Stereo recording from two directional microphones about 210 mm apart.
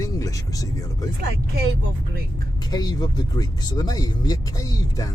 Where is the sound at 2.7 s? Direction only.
20° left (ahead or behind).